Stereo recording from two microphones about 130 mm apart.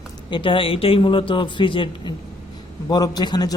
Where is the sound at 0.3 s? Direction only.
40° left (ahead or behind).